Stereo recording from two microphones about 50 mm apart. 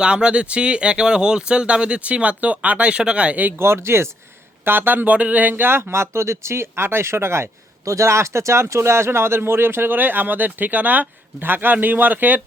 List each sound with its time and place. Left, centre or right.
0.0 s speech: centre
3.6 s speech: right
4.6 s speech: right
5.7 s speech: right
7.9 s speech: right